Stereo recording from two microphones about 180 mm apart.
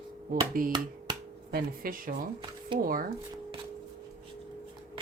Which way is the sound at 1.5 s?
50° right (ahead or behind).